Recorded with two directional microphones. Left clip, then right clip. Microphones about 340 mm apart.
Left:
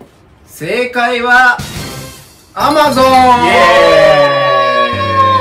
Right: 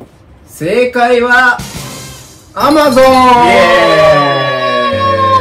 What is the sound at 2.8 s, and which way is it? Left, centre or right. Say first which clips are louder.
Speech: right 1 dB; centre.